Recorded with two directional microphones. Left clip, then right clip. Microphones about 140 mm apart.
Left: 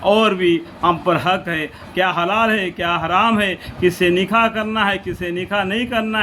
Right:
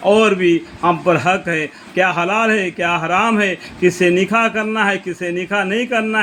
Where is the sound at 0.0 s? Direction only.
35° right (ahead or behind).